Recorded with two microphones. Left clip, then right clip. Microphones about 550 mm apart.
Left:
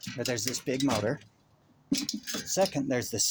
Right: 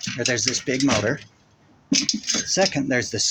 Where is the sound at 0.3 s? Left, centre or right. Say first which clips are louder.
Right 9 dB; left.